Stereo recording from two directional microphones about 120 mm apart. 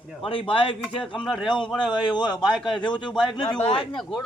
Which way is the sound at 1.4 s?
40° left (ahead or behind).